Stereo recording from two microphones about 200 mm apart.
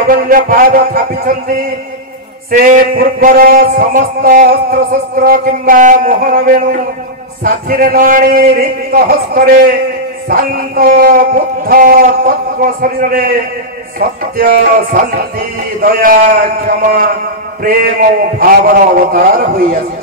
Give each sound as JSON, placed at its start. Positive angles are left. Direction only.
{"t": 0.1, "sound": "a man's voice", "side_deg": -45}
{"t": 2.6, "sound": "a man's voice", "side_deg": -45}
{"t": 18.4, "sound": "a man's voice", "side_deg": -45}